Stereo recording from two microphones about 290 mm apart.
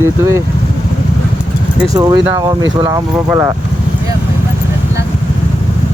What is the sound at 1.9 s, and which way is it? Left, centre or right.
Speech, centre.